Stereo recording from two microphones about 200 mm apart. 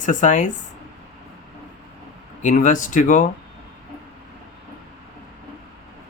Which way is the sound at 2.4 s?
40° left (ahead or behind).